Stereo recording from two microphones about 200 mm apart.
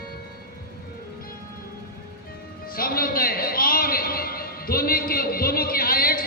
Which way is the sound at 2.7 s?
50° left (ahead or behind).